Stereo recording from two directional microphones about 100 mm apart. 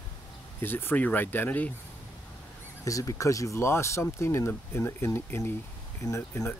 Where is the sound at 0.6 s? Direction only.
20° left (ahead or behind).